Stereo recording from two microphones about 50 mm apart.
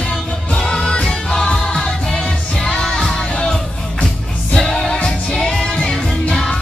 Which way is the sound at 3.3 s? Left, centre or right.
Centre.